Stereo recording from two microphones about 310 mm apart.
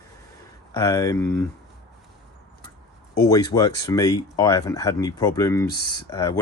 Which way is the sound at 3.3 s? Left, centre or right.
Centre.